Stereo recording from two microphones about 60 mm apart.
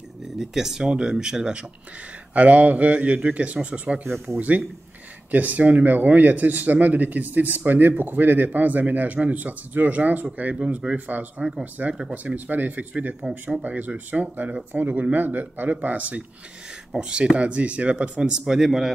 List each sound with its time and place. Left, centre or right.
0.4 s speech: centre
2.3 s speech: right
10.5 s speech: centre